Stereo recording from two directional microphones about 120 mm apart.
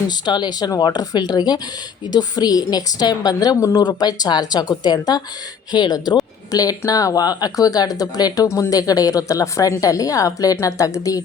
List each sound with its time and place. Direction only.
0.1 s a woman's voice: 35° left (ahead or behind)